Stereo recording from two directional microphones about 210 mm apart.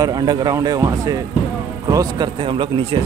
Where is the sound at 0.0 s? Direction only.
20° right (ahead or behind).